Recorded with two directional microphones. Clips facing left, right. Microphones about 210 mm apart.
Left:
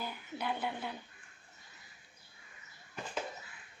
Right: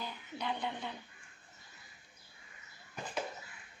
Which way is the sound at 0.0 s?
5° left (ahead or behind).